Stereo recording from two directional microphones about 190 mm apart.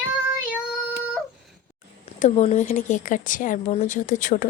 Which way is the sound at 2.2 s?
35° left (ahead or behind).